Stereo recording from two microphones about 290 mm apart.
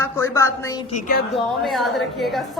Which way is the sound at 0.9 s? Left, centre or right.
Left.